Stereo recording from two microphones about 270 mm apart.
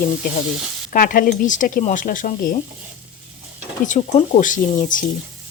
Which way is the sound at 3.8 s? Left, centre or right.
Left.